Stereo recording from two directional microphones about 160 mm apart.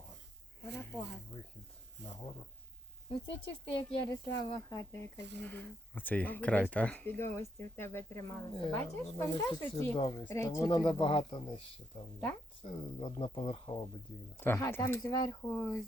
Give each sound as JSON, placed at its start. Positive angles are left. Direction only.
{"t": 0.8, "sound": "speech", "side_deg": 15}
{"t": 2.0, "sound": "speech", "side_deg": -90}
{"t": 3.1, "sound": "speech", "side_deg": 30}
{"t": 4.7, "sound": "speech", "side_deg": 20}
{"t": 14.4, "sound": "speech", "side_deg": 15}